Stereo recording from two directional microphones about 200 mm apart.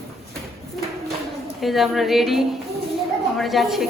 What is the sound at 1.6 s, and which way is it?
A woman's voice, centre (ahead or behind).